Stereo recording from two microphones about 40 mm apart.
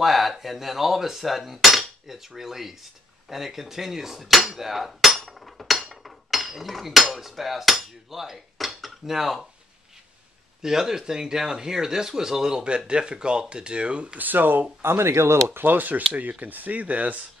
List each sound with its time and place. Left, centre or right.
0.0 s cutlery: centre
3.3 s speech: centre
4.5 s cutlery: centre
5.3 s speech: centre
10.6 s speech: centre
12.6 s speech: right
14.1 s speech: right
14.8 s speech: right
15.7 s speech: right